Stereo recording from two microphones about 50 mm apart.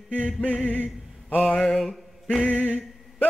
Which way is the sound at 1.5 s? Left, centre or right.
Left.